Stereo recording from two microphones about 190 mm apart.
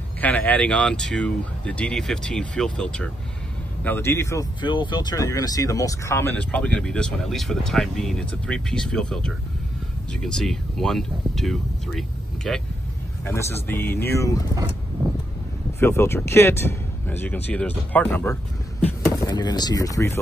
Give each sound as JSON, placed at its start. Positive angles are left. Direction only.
{"t": 0.2, "sound": "speech", "side_deg": 10}
{"t": 13.2, "sound": "speech", "side_deg": 15}
{"t": 15.8, "sound": "speech", "side_deg": 15}
{"t": 19.2, "sound": "speech", "side_deg": 20}